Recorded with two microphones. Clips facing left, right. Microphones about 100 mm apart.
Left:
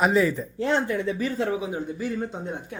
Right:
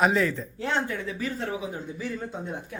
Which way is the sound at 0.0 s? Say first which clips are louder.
Left 2 dB; 5° left (ahead or behind).